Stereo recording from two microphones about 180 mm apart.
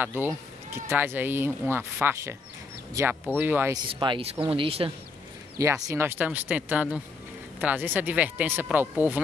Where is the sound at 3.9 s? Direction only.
25° right (ahead or behind).